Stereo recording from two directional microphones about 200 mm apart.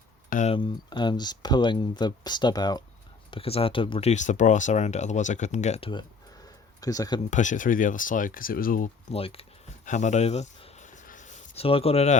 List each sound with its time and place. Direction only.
0.3 s speech: 40° left (ahead or behind)
0.5 s speech: 25° left (ahead or behind)
7.3 s speech: 40° left (ahead or behind)
9.1 s a sound: 30° left (ahead or behind)